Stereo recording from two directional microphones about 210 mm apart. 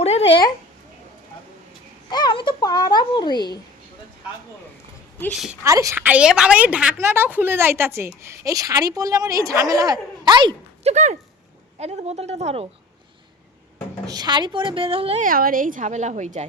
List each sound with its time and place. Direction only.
0.0 s a sound: 30° left (ahead or behind)
2.0 s speech: 20° left (ahead or behind)
5.2 s a woman's voice: centre (ahead or behind)
5.6 s a woman's voice: 15° right (ahead or behind); by 12.6 s 30° right (ahead or behind)
14.1 s a woman's voice: 20° right (ahead or behind)
15.3 s a woman's voice: 40° right (ahead or behind)